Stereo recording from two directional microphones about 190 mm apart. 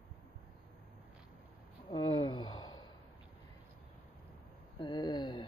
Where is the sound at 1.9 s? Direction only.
20° left (ahead or behind).